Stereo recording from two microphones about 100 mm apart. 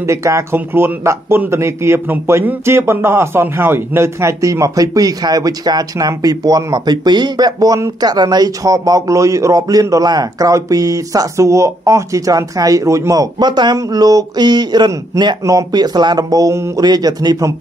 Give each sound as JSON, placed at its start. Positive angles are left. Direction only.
{"t": 0.0, "sound": "speech", "side_deg": -30}
{"t": 16.8, "sound": "speech", "side_deg": -40}